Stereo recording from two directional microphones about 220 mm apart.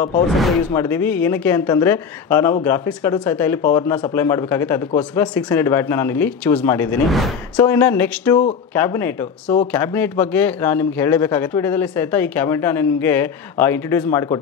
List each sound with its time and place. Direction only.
0.7 s a man's voice: 10° left (ahead or behind)
7.6 s a man's voice: 10° left (ahead or behind)